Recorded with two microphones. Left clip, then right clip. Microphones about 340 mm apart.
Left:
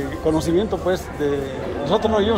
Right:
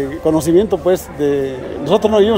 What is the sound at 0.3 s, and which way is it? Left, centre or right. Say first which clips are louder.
Speech: right 7 dB; right.